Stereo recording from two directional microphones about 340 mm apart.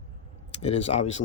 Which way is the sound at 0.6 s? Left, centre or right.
Centre.